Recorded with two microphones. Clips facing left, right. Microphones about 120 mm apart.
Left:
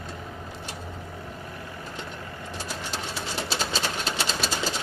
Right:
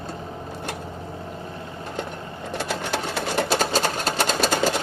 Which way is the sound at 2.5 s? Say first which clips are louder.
Right 9 dB; 65° right (ahead or behind).